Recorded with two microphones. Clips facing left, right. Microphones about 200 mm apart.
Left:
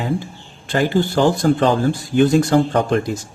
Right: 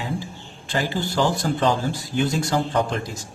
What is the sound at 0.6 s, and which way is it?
Speech, 55° left (ahead or behind).